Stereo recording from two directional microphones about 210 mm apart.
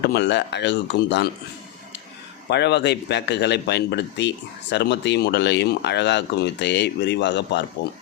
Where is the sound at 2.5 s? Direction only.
55° left (ahead or behind).